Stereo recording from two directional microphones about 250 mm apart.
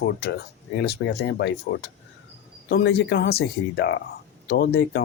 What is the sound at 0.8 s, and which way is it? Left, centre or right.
Speech, left.